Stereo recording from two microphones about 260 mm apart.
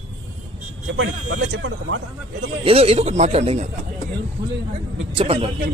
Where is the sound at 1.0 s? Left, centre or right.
Right.